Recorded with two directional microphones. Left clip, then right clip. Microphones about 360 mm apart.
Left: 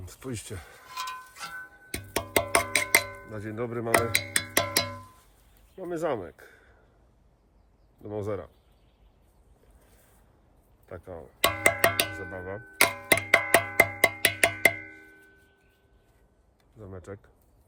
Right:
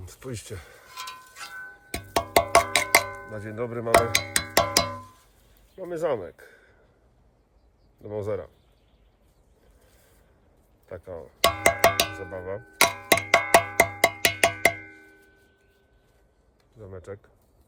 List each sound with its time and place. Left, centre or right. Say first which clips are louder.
0.0 s speech: even; centre
0.9 s a sound: left 3 dB; centre
1.5 s music: right 2 dB; centre
5.7 s speech: right 3 dB; centre
8.0 s speech: right 3 dB; centre
10.8 s cowbell: right 3 dB; centre
16.7 s speech: right 3 dB; centre